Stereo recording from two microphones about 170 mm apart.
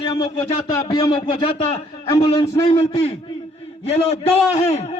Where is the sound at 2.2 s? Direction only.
35° left (ahead or behind).